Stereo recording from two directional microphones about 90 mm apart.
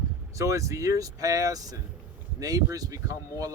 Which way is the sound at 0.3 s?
35° right (ahead or behind).